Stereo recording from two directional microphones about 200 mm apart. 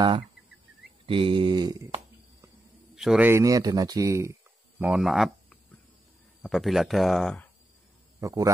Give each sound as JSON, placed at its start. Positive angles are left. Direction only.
{"t": 1.0, "sound": "mantra", "side_deg": -25}
{"t": 3.0, "sound": "speech", "side_deg": -5}
{"t": 4.7, "sound": "speech", "side_deg": -5}
{"t": 8.2, "sound": "a man's voice", "side_deg": -15}